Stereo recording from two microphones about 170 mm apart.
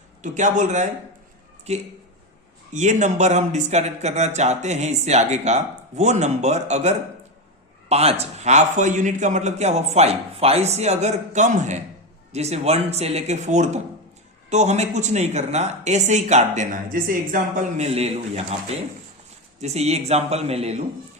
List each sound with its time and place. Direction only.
0.2 s a man's voice: 45° right (ahead or behind)